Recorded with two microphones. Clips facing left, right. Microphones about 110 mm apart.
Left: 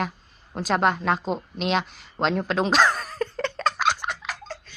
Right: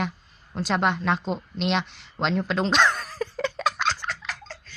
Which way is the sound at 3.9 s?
15° left (ahead or behind).